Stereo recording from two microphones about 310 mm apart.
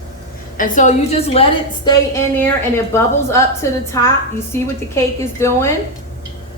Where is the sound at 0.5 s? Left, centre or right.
Left.